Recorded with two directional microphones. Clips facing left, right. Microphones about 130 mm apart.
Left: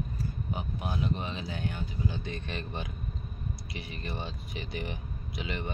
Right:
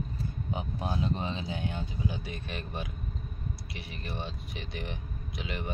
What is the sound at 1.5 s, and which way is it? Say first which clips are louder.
Speech: even; 20° right (ahead or behind).